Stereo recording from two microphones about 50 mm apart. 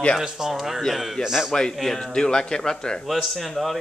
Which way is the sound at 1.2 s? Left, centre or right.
Centre.